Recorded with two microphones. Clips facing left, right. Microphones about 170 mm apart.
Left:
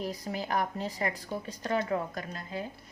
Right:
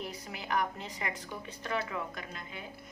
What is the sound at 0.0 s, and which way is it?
A woman's voice, 35° left (ahead or behind).